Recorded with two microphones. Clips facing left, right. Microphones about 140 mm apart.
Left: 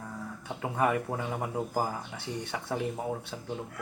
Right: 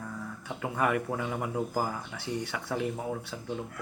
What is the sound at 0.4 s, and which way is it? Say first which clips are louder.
Speech: left 1 dB; 25° left (ahead or behind).